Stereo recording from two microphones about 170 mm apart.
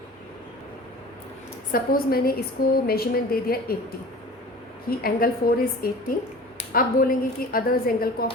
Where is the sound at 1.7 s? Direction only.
60° left (ahead or behind).